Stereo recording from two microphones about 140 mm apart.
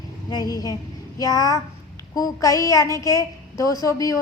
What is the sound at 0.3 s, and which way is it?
A child's voice, 30° left (ahead or behind).